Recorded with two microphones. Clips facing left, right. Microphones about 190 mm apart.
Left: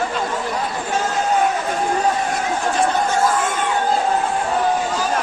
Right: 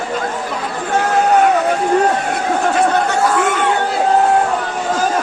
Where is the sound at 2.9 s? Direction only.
70° right (ahead or behind).